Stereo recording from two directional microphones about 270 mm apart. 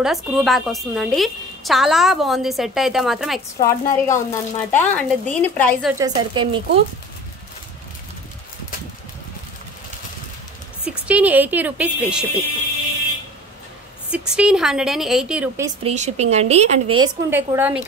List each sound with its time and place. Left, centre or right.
0.0 s a woman's voice: centre
3.6 s speech: centre
5.9 s a woman's voice: centre
10.9 s a woman's voice: centre
14.1 s a woman's voice: centre
15.8 s a woman's voice: right
17.3 s a woman's voice: centre